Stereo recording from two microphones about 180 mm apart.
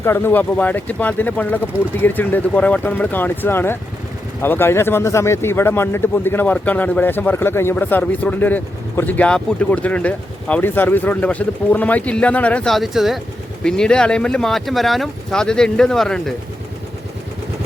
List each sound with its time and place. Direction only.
0.0 s a man's voice: 10° left (ahead or behind)